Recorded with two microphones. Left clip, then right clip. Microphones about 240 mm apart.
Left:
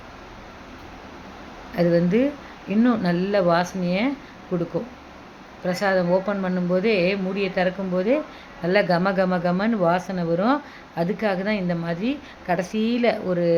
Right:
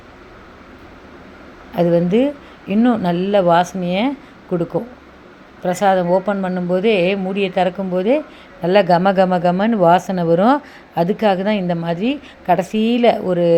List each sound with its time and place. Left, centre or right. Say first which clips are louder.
1.7 s speech: right 5 dB; centre
5.6 s speech: right 6 dB; centre